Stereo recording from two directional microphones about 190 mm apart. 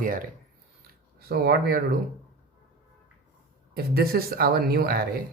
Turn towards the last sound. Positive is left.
turn(degrees=-55)  # may be behind; listen again after turning